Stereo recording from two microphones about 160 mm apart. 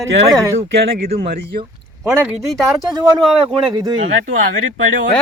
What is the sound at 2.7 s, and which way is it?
Speech, 25° right (ahead or behind).